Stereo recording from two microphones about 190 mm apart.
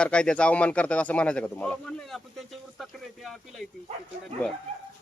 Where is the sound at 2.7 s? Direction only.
Centre (ahead or behind).